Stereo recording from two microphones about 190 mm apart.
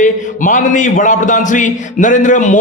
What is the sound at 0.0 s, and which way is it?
A man's voice, 40° left (ahead or behind).